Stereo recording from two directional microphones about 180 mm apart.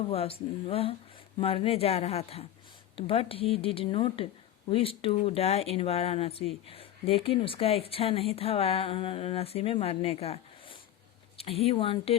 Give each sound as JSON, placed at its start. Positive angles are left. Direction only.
{"t": 0.1, "sound": "speech", "side_deg": 30}